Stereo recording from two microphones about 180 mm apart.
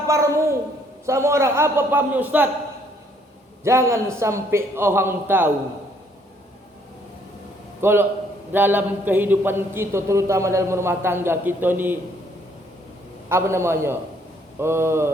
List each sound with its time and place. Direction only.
0.1 s speech: 15° right (ahead or behind)
3.6 s speech: 15° right (ahead or behind)
7.8 s a man's voice: 15° right (ahead or behind)
13.2 s speech: 15° right (ahead or behind)